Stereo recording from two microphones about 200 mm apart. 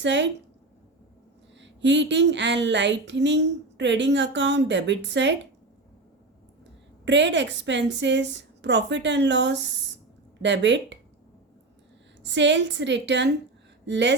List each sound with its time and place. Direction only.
0.0 s speech: 65° right (ahead or behind)
1.5 s speech: 65° right (ahead or behind)
7.0 s speech: 60° right (ahead or behind)
12.2 s speech: 65° right (ahead or behind)